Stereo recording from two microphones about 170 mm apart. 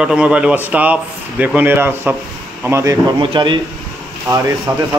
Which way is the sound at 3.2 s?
30° right (ahead or behind).